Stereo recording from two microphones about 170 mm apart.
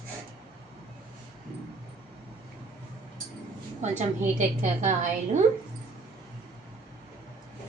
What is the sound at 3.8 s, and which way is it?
A woman's voice, 45° right (ahead or behind).